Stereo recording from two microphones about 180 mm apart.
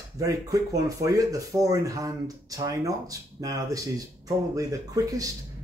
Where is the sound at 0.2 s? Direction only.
20° right (ahead or behind).